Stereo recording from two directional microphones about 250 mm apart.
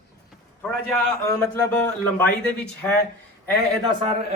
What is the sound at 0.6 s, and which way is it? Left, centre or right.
Speech, centre.